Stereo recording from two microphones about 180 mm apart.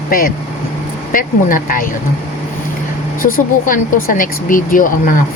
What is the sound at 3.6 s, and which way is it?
Speech, 50° left (ahead or behind).